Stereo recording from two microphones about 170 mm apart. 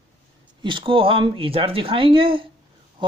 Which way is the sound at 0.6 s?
30° right (ahead or behind).